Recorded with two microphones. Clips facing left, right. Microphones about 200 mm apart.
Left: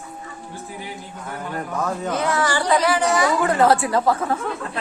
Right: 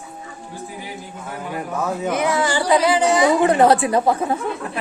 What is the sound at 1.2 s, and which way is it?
Speech, 10° right (ahead or behind).